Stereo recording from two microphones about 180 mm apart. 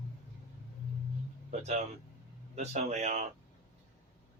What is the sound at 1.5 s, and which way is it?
Speech, 35° right (ahead or behind).